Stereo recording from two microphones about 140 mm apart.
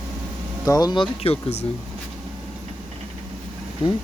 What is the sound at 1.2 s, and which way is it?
Speech, 45° left (ahead or behind).